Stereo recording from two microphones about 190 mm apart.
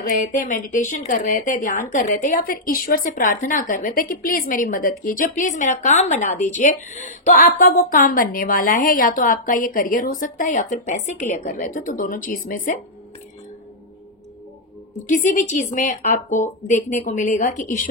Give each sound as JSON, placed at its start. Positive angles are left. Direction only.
{"t": 0.0, "sound": "speech", "side_deg": 45}
{"t": 15.0, "sound": "speech", "side_deg": 45}